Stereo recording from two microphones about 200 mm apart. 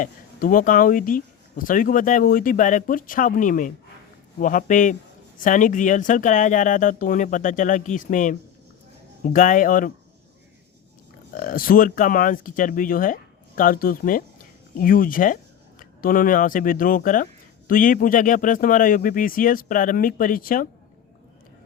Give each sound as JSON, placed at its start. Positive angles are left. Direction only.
{"t": 0.0, "sound": "speech", "side_deg": 45}
{"t": 11.3, "sound": "speech", "side_deg": 45}